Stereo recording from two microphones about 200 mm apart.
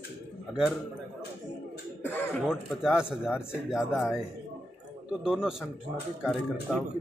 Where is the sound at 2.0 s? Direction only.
10° left (ahead or behind).